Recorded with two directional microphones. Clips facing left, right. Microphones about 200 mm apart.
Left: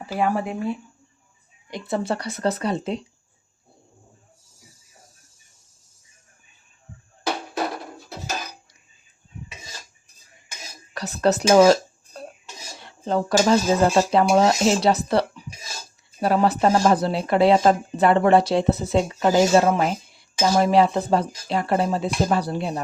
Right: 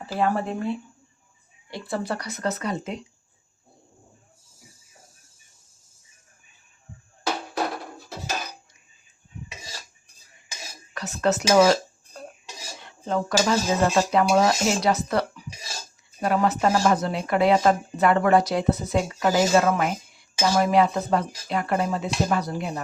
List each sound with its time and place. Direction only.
0.0 s speech: 10° left (ahead or behind)
1.7 s speech: 25° left (ahead or behind)
10.9 s a sound: 35° left (ahead or behind)
12.8 s speech: 35° left (ahead or behind)